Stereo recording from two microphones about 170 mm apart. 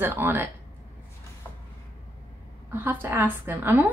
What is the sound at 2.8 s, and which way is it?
Speech, 10° right (ahead or behind).